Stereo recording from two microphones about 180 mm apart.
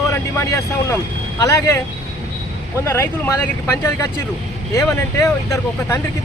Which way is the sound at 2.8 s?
15° left (ahead or behind).